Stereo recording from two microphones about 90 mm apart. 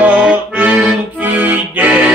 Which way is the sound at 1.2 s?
20° right (ahead or behind).